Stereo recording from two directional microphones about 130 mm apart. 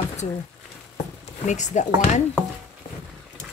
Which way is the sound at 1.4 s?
65° left (ahead or behind).